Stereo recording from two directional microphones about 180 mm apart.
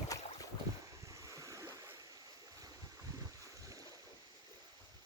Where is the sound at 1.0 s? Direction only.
15° right (ahead or behind).